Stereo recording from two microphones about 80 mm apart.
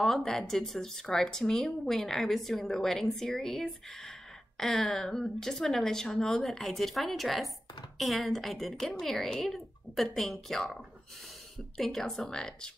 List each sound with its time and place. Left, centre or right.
0.0 s speech: centre